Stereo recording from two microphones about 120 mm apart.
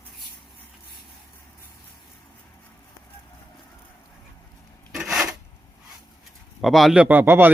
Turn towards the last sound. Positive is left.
turn(degrees=-15)  # may be behind; listen again after turning